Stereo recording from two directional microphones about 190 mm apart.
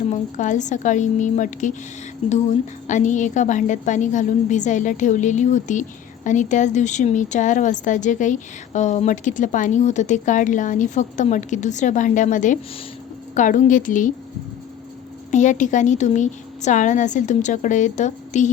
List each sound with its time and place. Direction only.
0.1 s a woman's voice: 40° left (ahead or behind)
2.8 s a woman's voice: 40° left (ahead or behind)
15.3 s a woman's voice: 40° left (ahead or behind)